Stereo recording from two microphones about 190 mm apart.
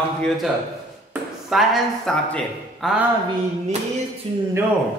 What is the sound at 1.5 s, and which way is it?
Speech, centre (ahead or behind).